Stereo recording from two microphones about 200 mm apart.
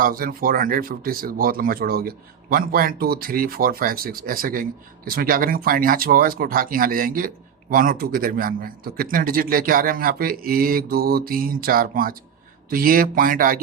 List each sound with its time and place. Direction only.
0.0 s speech: 45° right (ahead or behind)